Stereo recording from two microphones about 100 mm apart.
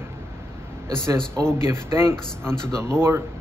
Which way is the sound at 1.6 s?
25° right (ahead or behind).